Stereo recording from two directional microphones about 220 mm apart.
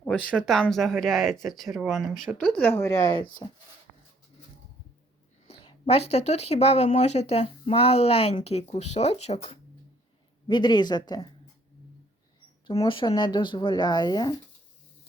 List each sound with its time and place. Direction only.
0.0 s speech: 5° left (ahead or behind)
3.4 s speech: 25° left (ahead or behind)
5.5 s a sound: 25° left (ahead or behind)
6.1 s speech: 30° left (ahead or behind)
12.6 s speech: 20° left (ahead or behind)